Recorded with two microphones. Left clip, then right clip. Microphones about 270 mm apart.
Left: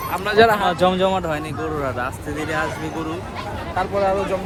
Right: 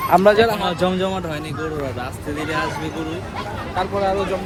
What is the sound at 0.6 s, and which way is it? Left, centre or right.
Speech, left.